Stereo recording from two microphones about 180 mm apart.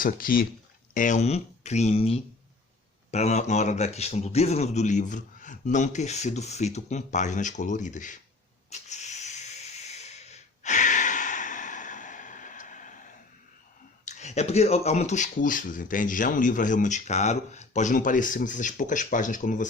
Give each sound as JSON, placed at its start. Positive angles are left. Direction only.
{"t": 0.0, "sound": "speech", "side_deg": 50}
{"t": 8.7, "sound": "hiss", "side_deg": 40}
{"t": 14.0, "sound": "speech", "side_deg": 40}